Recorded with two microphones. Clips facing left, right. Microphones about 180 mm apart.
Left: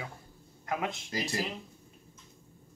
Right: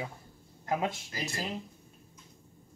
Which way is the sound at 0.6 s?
30° right (ahead or behind).